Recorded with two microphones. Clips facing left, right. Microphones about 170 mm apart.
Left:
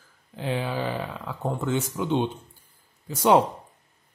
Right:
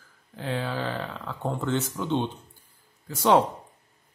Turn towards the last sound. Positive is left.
turn(degrees=15)  # may be behind; listen again after turning